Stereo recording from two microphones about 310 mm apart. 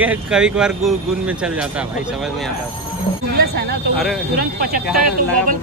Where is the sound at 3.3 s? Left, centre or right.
Right.